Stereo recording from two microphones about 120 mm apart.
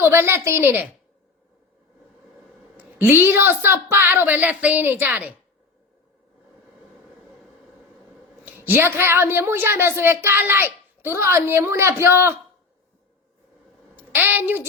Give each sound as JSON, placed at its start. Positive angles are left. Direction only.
{"t": 0.0, "sound": "a woman's voice", "side_deg": -20}
{"t": 3.0, "sound": "a woman's voice", "side_deg": -15}
{"t": 8.4, "sound": "a woman's voice", "side_deg": -15}
{"t": 13.9, "sound": "a sound", "side_deg": -15}